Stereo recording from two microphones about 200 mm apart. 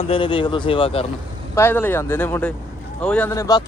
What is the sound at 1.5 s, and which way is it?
Speech, 10° left (ahead or behind).